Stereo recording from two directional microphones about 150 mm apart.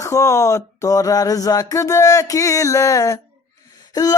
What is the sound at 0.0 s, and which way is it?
Mantra, 20° left (ahead or behind).